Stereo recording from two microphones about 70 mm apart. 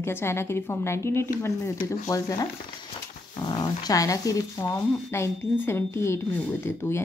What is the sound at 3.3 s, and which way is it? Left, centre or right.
Speech, left.